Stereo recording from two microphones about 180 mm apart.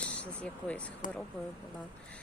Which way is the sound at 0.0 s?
5° left (ahead or behind).